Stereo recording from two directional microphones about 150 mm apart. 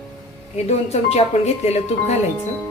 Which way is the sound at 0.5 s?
45° left (ahead or behind).